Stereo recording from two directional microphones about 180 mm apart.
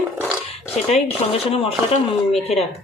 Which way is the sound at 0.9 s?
35° left (ahead or behind).